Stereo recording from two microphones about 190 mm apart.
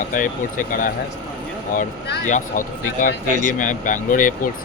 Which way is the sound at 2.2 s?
40° left (ahead or behind).